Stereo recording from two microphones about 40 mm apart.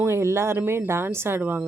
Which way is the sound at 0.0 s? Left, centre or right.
Right.